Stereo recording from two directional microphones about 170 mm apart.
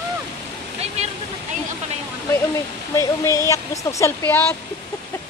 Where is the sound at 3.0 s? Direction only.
20° left (ahead or behind).